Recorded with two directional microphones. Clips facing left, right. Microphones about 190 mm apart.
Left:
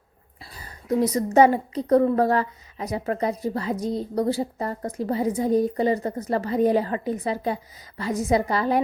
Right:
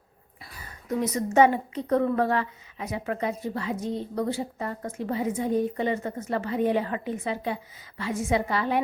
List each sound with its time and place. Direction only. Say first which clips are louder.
0.5 s a woman's voice: left 5 dB; 35° left (ahead or behind)